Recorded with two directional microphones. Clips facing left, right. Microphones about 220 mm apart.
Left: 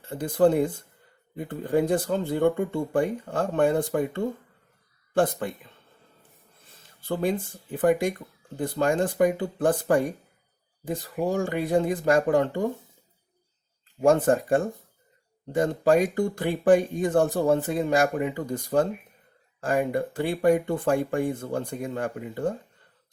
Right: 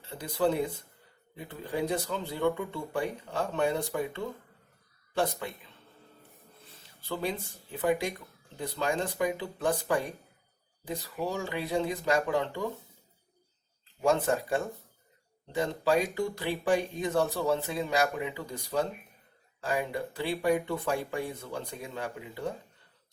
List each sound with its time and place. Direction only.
0.0 s speech: 50° left (ahead or behind)
14.0 s speech: 50° left (ahead or behind)